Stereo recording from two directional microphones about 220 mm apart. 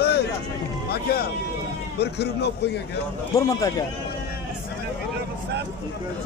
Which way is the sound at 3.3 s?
15° left (ahead or behind).